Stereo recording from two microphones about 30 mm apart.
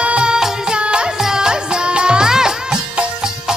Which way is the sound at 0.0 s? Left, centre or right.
Right.